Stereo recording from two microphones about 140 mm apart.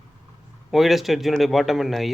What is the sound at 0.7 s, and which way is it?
Speech, centre (ahead or behind).